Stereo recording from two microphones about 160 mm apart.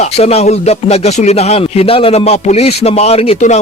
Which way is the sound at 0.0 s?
40° left (ahead or behind).